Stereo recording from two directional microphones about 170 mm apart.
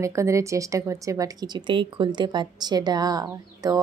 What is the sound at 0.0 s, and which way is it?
Speech, 15° right (ahead or behind).